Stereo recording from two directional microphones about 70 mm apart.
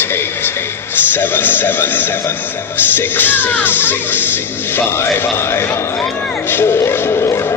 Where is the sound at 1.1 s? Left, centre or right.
Left.